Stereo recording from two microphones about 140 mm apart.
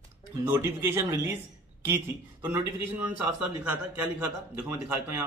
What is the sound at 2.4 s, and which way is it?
Speech, 20° right (ahead or behind).